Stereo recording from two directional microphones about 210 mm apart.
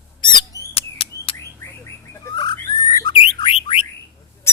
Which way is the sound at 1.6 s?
15° left (ahead or behind).